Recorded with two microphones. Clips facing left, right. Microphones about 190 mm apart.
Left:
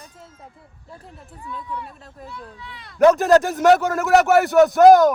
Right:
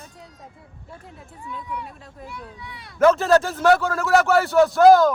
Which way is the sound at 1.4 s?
15° right (ahead or behind).